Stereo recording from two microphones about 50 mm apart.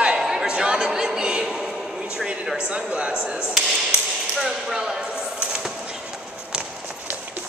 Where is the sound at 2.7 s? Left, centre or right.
Right.